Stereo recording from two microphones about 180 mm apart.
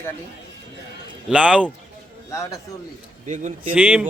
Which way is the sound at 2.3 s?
15° left (ahead or behind).